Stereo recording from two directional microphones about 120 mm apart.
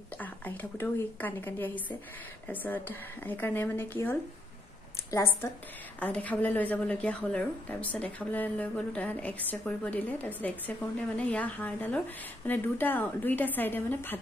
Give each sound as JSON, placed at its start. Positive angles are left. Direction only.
{"t": 0.2, "sound": "a woman's voice", "side_deg": 15}